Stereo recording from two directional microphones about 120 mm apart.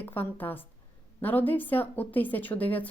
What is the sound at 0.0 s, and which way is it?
A woman's voice, 15° left (ahead or behind).